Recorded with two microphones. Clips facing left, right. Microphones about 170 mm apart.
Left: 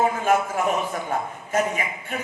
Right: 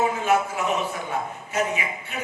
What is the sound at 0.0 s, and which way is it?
A man's voice, 50° left (ahead or behind).